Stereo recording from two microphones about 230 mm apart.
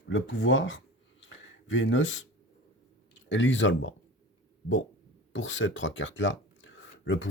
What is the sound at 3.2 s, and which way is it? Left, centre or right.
Speech, left.